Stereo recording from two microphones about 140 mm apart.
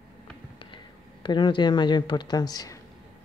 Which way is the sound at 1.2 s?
35° left (ahead or behind).